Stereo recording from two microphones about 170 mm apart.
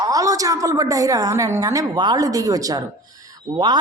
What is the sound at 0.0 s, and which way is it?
Speech, 20° right (ahead or behind).